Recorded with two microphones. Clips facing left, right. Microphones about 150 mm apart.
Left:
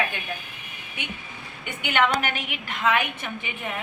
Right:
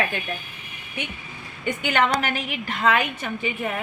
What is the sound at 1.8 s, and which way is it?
A woman's voice, 35° right (ahead or behind).